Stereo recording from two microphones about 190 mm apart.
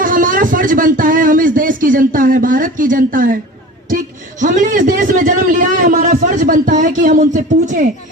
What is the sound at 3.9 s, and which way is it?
A man's voice, 45° right (ahead or behind).